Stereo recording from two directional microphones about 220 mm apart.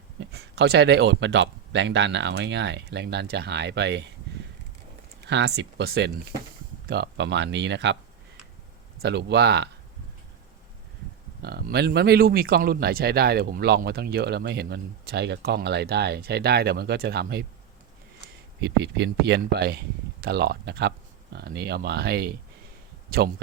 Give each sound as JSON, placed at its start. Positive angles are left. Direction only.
{"t": 0.2, "sound": "speech", "side_deg": -50}
{"t": 5.2, "sound": "speech", "side_deg": -50}
{"t": 9.0, "sound": "speech", "side_deg": -50}
{"t": 11.4, "sound": "speech", "side_deg": -45}
{"t": 18.6, "sound": "speech", "side_deg": -50}